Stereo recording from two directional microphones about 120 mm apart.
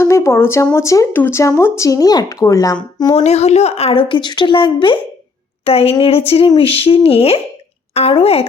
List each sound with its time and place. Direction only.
0.0 s speech: 25° left (ahead or behind)
3.2 s a woman's voice: 65° left (ahead or behind)